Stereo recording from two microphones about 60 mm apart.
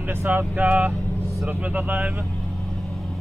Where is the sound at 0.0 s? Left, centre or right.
Right.